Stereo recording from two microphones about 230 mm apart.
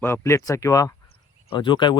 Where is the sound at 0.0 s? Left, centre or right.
Centre.